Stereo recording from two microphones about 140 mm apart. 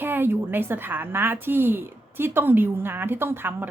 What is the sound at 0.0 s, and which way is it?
A woman's voice, 15° right (ahead or behind).